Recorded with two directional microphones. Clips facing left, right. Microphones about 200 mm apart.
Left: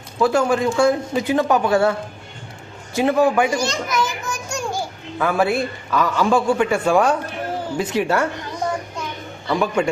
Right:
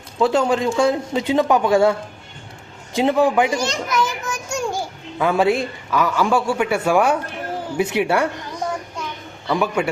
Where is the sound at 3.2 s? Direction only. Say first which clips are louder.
Even; 15° right (ahead or behind).